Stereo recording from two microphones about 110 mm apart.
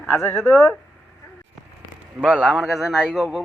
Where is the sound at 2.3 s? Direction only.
5° right (ahead or behind).